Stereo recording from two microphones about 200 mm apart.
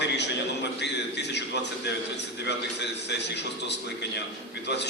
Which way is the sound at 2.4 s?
60° left (ahead or behind).